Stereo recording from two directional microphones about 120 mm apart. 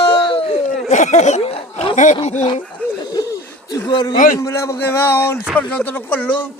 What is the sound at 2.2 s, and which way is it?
Speech, 65° left (ahead or behind).